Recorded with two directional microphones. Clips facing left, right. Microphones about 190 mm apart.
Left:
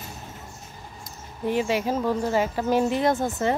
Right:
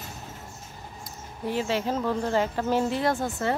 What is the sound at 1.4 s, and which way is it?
Speech, 15° left (ahead or behind).